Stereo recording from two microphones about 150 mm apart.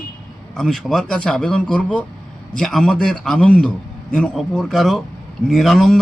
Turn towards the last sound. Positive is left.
turn(degrees=0)  # may be behind; listen again after turning